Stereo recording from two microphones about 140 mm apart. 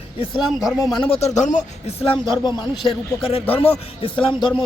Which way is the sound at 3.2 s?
45° left (ahead or behind).